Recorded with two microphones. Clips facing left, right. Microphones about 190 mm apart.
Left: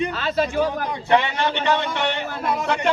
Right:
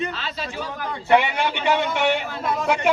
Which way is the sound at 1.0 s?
10° right (ahead or behind).